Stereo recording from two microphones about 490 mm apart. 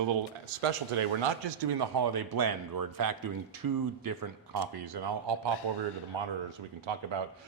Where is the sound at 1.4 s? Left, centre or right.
Right.